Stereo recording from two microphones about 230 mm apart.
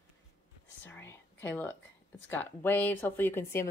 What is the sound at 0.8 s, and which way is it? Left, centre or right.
Speech, centre.